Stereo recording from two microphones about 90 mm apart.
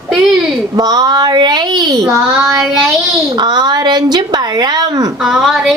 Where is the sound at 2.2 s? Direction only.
15° right (ahead or behind).